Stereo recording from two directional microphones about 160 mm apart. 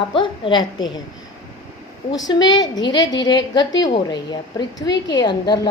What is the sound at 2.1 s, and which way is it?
A woman's voice, 25° left (ahead or behind).